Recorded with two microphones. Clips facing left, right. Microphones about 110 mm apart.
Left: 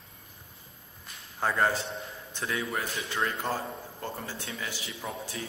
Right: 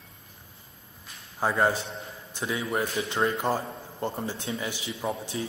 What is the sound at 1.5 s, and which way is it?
A man's voice, 15° right (ahead or behind).